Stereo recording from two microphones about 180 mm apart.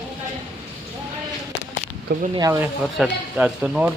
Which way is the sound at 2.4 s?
15° right (ahead or behind).